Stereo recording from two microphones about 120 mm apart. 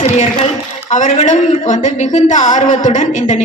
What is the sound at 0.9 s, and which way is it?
A woman's voice, 90° left.